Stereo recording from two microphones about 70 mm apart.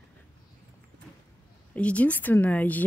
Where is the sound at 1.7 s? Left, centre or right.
Centre.